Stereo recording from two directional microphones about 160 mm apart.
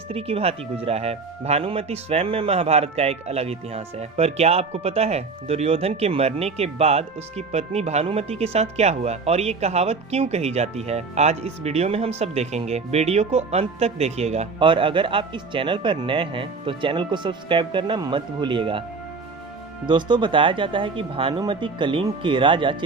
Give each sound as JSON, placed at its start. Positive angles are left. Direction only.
{"t": 0.1, "sound": "speech", "side_deg": -40}
{"t": 14.6, "sound": "speech", "side_deg": -30}
{"t": 19.9, "sound": "speech", "side_deg": -30}